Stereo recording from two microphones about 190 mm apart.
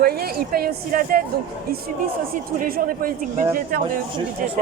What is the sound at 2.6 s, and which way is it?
A woman's voice, 45° right (ahead or behind).